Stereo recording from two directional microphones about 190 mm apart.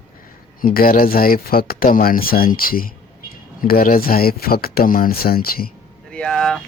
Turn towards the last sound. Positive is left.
turn(degrees=5)  # may be behind; listen again after turning